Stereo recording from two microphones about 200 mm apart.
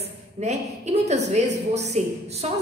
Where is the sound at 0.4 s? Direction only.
35° right (ahead or behind).